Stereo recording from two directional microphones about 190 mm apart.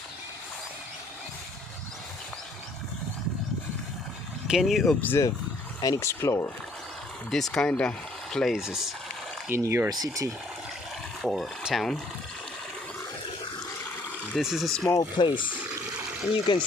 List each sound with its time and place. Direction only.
4.4 s speech: centre (ahead or behind); by 6.5 s 15° left (ahead or behind)
7.3 s speech: centre (ahead or behind)
9.5 s speech: 10° right (ahead or behind)
11.2 s speech: centre (ahead or behind)
14.3 s speech: centre (ahead or behind)
14.8 s speech: 20° left (ahead or behind)
16.5 s speech: 25° left (ahead or behind)